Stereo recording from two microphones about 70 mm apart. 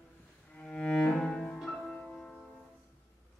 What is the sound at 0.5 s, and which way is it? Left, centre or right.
Cello, centre.